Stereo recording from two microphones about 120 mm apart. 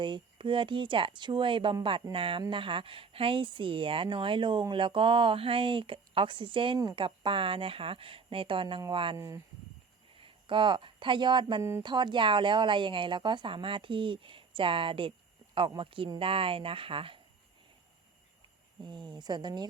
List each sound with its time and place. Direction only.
0.0 s speech: 40° right (ahead or behind)
9.1 s speech: 25° right (ahead or behind)
10.2 s speech: 45° right (ahead or behind)
18.8 s speech: 40° right (ahead or behind)